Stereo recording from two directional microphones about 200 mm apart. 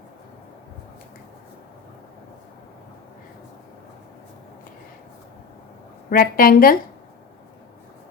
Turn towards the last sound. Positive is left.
turn(degrees=45)  # may be behind; listen again after turning